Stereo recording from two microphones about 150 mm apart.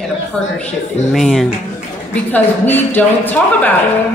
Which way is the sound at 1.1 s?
Centre (ahead or behind).